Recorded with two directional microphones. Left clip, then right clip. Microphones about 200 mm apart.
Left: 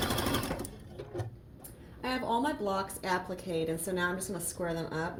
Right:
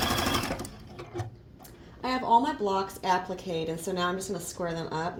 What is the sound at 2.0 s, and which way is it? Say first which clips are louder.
A woman's voice: right 8 dB; 15° right (ahead or behind).